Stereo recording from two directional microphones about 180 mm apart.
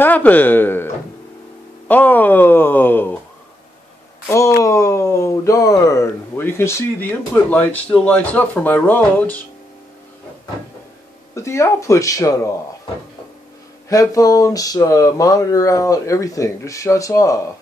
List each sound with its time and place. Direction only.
0.0 s speech: 10° left (ahead or behind)
4.3 s speech: 15° left (ahead or behind)
11.3 s speech: 15° left (ahead or behind)
13.8 s speech: 20° left (ahead or behind)